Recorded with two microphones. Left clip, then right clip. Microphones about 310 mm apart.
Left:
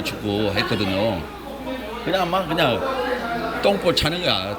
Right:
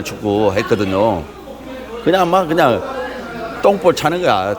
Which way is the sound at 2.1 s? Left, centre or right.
Right.